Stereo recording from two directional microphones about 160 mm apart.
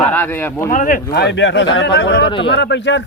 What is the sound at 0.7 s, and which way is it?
A man's voice, 55° left (ahead or behind).